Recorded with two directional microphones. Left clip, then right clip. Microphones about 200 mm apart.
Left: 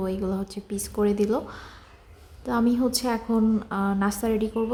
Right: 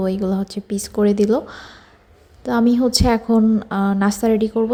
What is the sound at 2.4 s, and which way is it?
A woman's voice, 25° right (ahead or behind).